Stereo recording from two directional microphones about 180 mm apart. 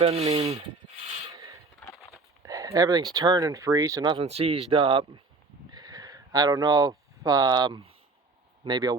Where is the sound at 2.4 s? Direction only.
20° right (ahead or behind).